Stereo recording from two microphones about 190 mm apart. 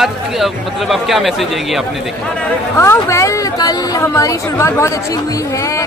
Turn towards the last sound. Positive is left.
turn(degrees=15)  # may be behind; listen again after turning